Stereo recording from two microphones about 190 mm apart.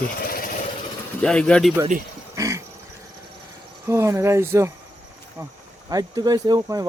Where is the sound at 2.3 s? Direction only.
15° right (ahead or behind).